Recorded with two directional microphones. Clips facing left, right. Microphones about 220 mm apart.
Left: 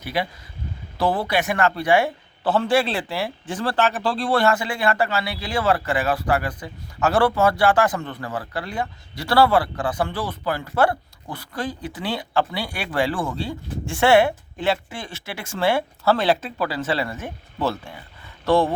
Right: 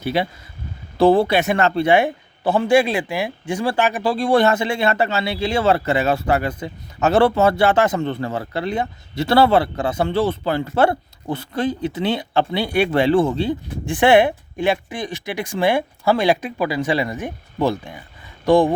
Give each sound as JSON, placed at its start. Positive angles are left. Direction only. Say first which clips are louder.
{"t": 0.0, "sound": "a man's voice", "louder": "right 5 dB", "side_deg": -25}